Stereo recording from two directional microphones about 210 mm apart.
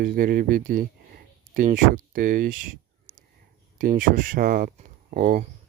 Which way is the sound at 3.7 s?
40° right (ahead or behind).